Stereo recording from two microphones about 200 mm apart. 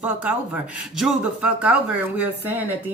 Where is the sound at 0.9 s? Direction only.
5° right (ahead or behind).